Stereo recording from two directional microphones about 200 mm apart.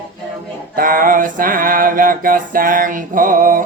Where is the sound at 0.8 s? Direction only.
45° right (ahead or behind).